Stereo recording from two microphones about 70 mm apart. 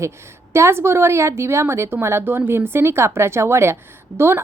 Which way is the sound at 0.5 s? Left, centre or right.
Right.